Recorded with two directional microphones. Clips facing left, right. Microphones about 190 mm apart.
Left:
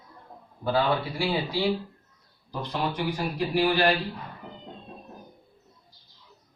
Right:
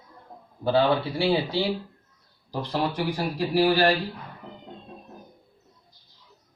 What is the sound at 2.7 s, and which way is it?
Speech, 35° right (ahead or behind).